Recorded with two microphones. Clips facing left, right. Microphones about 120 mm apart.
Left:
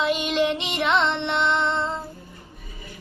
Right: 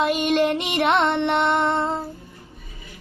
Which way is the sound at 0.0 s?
50° right (ahead or behind).